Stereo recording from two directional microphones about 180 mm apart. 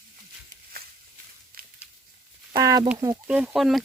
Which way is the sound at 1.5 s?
55° right (ahead or behind).